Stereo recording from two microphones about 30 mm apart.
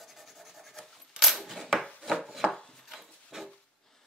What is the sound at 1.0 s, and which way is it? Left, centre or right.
Coin, centre.